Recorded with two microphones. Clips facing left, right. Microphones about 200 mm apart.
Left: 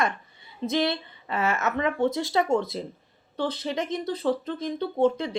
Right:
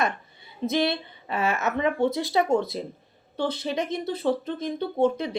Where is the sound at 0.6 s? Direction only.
15° right (ahead or behind).